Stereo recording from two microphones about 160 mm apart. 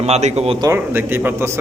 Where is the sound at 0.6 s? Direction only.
15° right (ahead or behind).